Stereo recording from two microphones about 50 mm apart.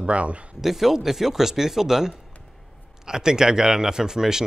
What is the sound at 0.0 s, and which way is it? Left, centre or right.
Speech, right.